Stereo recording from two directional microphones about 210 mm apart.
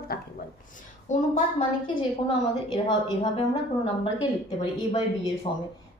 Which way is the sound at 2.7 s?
20° left (ahead or behind).